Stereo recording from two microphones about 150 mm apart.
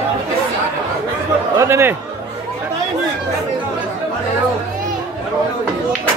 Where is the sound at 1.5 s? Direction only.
15° right (ahead or behind).